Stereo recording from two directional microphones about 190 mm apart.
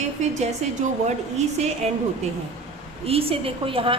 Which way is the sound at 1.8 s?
35° right (ahead or behind).